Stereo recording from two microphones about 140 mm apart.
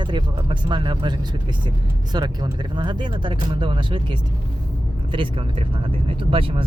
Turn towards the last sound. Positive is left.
turn(degrees=-40)  # may be behind; listen again after turning